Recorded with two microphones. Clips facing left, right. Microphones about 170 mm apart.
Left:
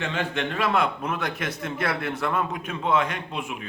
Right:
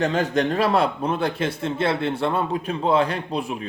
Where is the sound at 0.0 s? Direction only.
40° right (ahead or behind).